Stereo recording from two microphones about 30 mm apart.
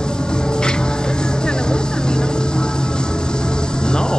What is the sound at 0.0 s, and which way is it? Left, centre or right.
Music, left.